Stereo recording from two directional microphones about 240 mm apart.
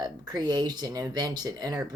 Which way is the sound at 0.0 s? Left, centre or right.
Centre.